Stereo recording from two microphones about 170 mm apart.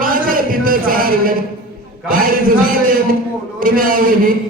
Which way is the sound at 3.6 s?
55° right (ahead or behind).